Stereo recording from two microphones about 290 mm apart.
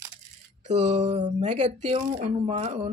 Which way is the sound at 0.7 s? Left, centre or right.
Right.